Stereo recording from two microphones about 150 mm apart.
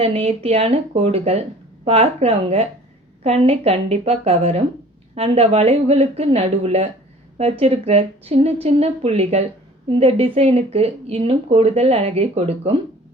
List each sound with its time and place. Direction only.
0.0 s a woman's voice: 40° right (ahead or behind)